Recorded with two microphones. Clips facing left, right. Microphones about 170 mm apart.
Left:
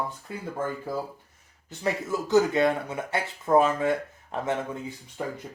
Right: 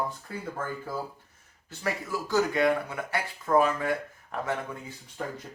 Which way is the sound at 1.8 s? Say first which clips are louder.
Left 4 dB; 20° left (ahead or behind).